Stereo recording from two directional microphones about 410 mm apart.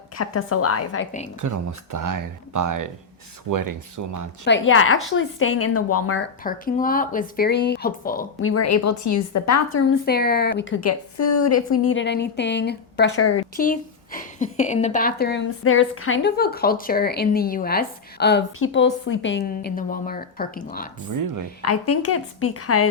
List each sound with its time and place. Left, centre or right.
0.2 s a woman's voice: left
1.4 s speech: right
4.4 s a woman's voice: left
6.4 s speech: centre; by 9.8 s left
10.1 s speech: left
10.8 s a woman's voice: left
13.6 s speech: centre
21.6 s a woman's voice: left